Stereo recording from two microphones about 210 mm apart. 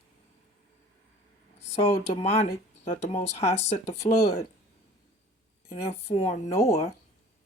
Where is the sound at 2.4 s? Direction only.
35° left (ahead or behind).